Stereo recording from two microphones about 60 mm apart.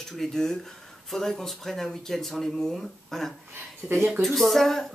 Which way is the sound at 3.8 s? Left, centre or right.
Centre.